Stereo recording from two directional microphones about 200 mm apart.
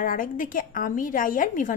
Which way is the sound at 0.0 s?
45° left (ahead or behind).